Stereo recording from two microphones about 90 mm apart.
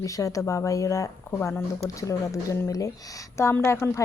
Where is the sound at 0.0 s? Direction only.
40° left (ahead or behind).